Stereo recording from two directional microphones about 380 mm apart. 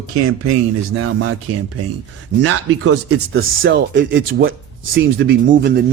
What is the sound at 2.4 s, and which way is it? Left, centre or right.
Speech, right.